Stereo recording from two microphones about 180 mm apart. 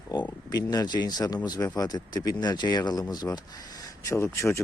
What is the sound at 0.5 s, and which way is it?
Speech, 20° left (ahead or behind).